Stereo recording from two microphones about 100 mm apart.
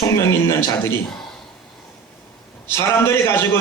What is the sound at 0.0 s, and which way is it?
Speech, 30° left (ahead or behind).